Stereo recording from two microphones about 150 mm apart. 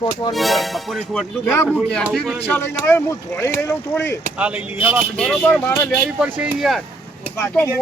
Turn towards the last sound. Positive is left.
turn(degrees=15)  # may be behind; listen again after turning